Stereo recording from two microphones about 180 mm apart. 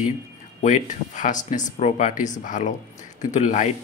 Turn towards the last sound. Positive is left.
turn(degrees=40)  # may be behind; listen again after turning